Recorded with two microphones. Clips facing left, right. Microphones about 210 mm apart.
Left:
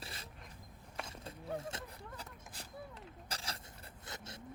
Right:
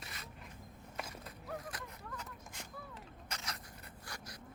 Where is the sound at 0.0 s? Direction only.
30° left (ahead or behind).